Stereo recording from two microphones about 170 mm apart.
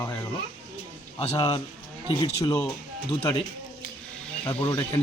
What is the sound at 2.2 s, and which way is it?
Speech, 30° left (ahead or behind).